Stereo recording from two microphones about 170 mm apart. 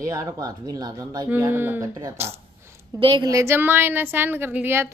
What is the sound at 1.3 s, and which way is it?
Speech, 15° right (ahead or behind).